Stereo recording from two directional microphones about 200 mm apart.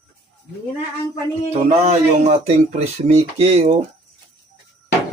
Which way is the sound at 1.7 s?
35° right (ahead or behind).